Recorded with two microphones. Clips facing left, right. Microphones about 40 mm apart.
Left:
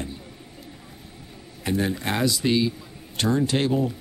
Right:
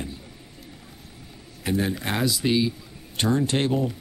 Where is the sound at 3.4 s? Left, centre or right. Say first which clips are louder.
Left 1 dB; right.